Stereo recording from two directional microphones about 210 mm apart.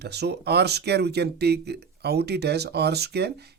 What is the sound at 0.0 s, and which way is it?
Speech, 50° right (ahead or behind).